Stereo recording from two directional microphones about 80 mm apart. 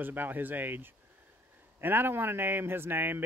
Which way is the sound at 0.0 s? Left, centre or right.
Right.